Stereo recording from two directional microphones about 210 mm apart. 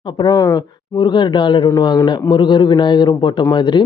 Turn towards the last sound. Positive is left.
turn(degrees=20)  # may be behind; listen again after turning